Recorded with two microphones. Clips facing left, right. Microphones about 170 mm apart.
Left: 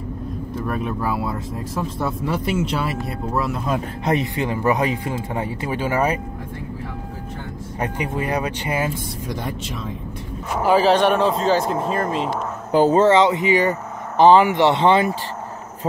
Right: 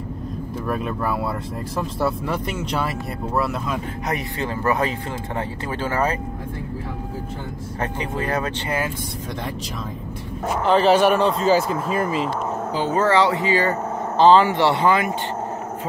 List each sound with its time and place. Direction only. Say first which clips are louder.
0.8 s speech: even; centre (ahead or behind)
4.0 s speech: left 5 dB; 25° left (ahead or behind)
7.8 s speech: left 2 dB; 10° left (ahead or behind)
10.6 s speech: left 1 dB; 10° left (ahead or behind)
10.9 s speech: even; 5° right (ahead or behind)
12.9 s speech: even; 25° left (ahead or behind)